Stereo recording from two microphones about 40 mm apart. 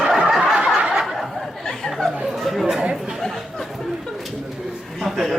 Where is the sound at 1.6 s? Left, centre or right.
Centre.